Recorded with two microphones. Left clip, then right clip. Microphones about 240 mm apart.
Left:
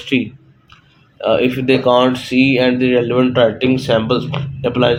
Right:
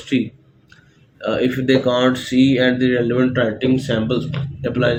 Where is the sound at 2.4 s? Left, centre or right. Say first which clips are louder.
Left 2 dB; left.